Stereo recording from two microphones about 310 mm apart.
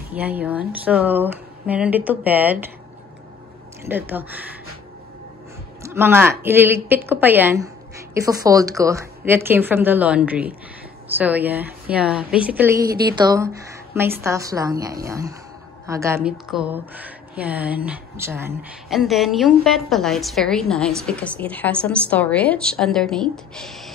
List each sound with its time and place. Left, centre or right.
0.1 s speech: centre
5.8 s a woman's voice: centre